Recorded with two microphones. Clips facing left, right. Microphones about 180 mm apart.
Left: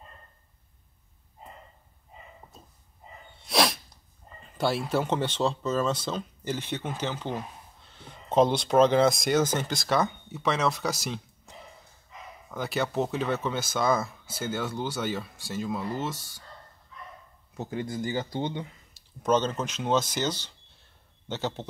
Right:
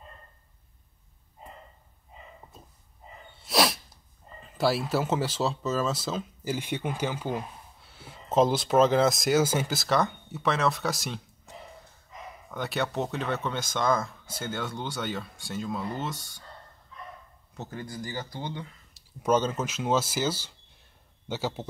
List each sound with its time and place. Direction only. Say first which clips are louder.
3.4 s sneeze: even; 5° right (ahead or behind)
4.6 s speech: right 1 dB; 5° right (ahead or behind)
17.6 s speech: left 5 dB; 20° left (ahead or behind)
18.9 s speech: even; 10° right (ahead or behind)